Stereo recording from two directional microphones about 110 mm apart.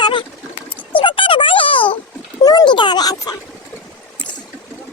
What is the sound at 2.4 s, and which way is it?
Speech, 35° left (ahead or behind).